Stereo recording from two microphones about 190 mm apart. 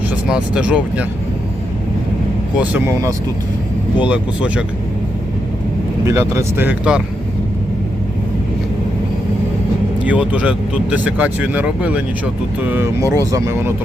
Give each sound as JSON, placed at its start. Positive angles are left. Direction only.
{"t": 0.3, "sound": "speech", "side_deg": -5}
{"t": 2.6, "sound": "speech", "side_deg": -15}
{"t": 6.1, "sound": "speech", "side_deg": -15}
{"t": 10.1, "sound": "speech", "side_deg": -5}